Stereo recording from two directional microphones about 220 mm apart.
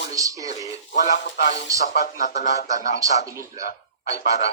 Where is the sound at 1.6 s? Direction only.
15° right (ahead or behind).